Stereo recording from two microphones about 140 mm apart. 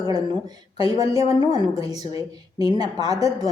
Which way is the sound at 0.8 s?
25° right (ahead or behind).